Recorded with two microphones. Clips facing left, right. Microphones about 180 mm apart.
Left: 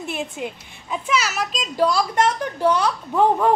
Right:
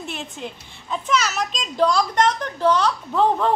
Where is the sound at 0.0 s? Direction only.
10° left (ahead or behind).